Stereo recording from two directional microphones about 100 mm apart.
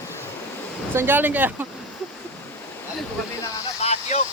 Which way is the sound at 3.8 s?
90° left.